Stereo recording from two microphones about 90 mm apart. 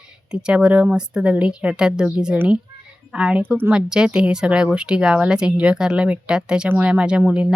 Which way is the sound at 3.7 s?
10° right (ahead or behind).